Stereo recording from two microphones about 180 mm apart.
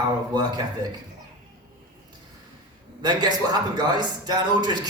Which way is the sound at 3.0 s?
25° right (ahead or behind).